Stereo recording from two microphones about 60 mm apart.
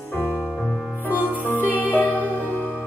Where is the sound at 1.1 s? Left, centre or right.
Right.